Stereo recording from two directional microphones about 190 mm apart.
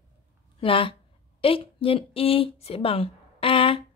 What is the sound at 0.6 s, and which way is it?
A woman's voice, 30° left (ahead or behind).